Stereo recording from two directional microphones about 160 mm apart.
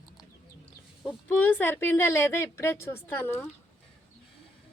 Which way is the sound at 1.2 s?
10° left (ahead or behind).